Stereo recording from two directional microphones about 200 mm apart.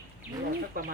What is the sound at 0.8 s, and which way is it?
Bird, 45° right (ahead or behind).